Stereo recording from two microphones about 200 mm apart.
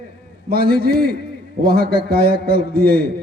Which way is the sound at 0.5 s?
50° right (ahead or behind).